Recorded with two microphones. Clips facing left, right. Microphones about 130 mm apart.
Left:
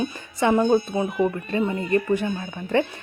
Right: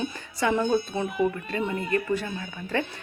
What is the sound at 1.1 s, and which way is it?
Speech, 20° left (ahead or behind).